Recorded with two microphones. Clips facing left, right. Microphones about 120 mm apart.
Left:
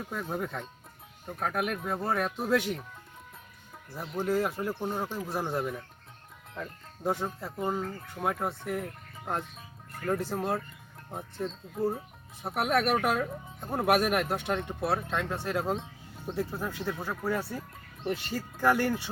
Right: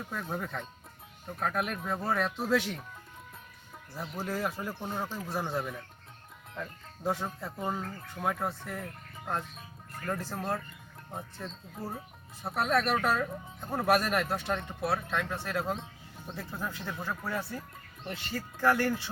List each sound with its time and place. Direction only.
0.1 s speech: 10° left (ahead or behind)
2.5 s speech: centre (ahead or behind)
3.9 s speech: centre (ahead or behind)
11.1 s speech: centre (ahead or behind)
12.5 s speech: 15° left (ahead or behind)
14.8 s speech: 25° left (ahead or behind)